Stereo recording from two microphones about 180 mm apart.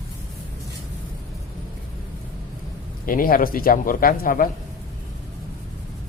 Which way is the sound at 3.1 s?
50° left (ahead or behind).